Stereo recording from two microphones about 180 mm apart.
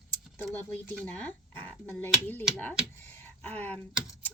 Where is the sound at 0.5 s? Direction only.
10° left (ahead or behind).